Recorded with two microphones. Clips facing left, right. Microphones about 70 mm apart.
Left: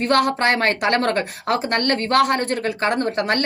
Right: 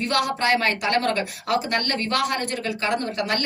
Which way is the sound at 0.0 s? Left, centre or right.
Left.